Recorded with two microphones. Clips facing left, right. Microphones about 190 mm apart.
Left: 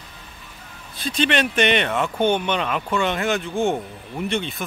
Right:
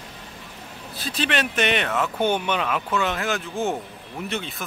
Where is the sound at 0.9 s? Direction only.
5° right (ahead or behind).